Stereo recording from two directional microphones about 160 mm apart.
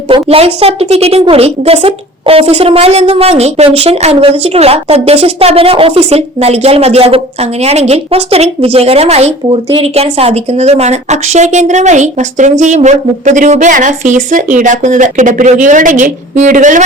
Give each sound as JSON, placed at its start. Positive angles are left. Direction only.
{"t": 0.1, "sound": "a woman's voice", "side_deg": -40}